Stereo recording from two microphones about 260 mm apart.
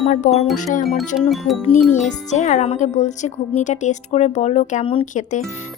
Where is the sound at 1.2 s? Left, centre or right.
Centre.